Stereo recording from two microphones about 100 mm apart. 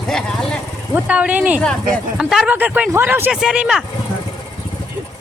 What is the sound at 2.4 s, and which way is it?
Speech, 15° right (ahead or behind).